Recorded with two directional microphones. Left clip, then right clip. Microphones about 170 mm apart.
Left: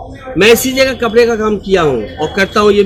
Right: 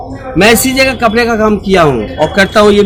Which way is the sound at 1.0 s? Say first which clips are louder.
Right 1 dB; 40° right (ahead or behind).